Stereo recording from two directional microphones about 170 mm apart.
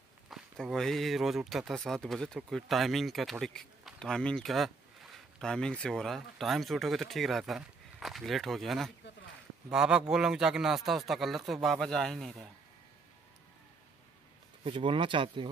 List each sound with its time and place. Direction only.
0.3 s speech: centre (ahead or behind)
14.6 s speech: 30° right (ahead or behind)